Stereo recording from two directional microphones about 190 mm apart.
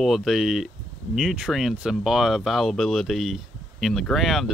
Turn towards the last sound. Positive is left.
turn(degrees=0)  # may be behind; listen again after turning